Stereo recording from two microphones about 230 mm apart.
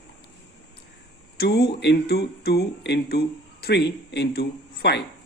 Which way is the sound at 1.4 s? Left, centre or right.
Left.